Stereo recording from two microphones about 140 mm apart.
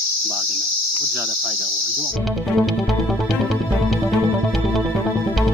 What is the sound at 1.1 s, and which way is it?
Cricket, 15° right (ahead or behind).